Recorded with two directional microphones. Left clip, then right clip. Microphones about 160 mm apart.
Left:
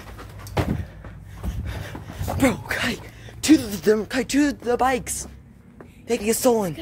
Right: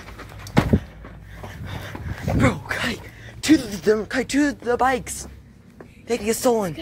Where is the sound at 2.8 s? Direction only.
25° left (ahead or behind).